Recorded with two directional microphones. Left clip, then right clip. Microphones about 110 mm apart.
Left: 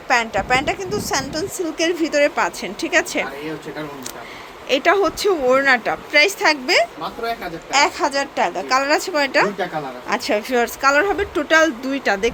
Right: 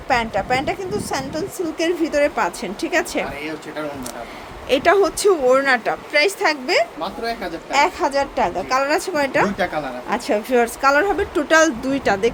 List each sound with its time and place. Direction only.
0.1 s a woman's voice: 10° right (ahead or behind)
4.7 s a woman's voice: 20° right (ahead or behind)